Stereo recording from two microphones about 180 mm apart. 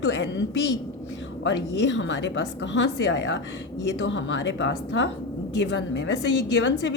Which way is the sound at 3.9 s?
90° left.